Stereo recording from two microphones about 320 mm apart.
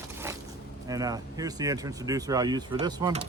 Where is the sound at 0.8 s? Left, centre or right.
Centre.